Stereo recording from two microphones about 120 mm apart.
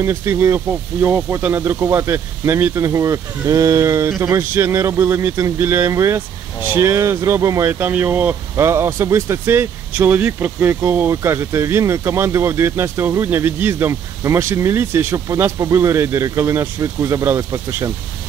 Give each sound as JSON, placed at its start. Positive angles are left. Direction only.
{"t": 0.0, "sound": "speech", "side_deg": -20}